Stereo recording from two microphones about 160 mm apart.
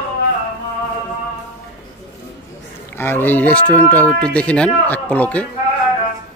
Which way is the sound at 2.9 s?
15° left (ahead or behind).